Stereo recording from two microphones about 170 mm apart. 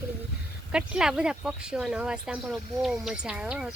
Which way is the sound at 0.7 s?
5° right (ahead or behind).